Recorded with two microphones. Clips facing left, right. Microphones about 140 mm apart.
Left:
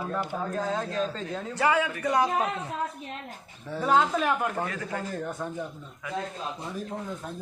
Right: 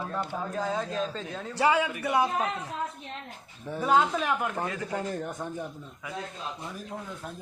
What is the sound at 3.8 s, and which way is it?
Speech, 5° right (ahead or behind).